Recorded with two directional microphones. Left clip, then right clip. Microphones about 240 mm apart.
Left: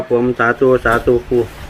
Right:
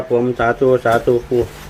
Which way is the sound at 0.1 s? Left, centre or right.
Centre.